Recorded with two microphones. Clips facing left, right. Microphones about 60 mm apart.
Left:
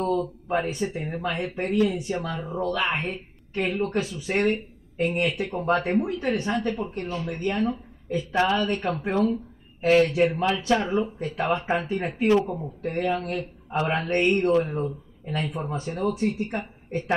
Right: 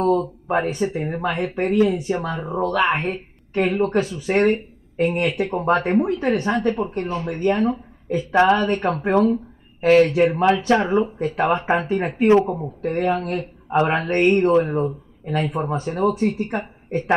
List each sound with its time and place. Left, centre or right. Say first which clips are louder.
0.0 s speech: right 6 dB; right
0.7 s speech: right 6 dB; right
2.6 s speech: right 6 dB; right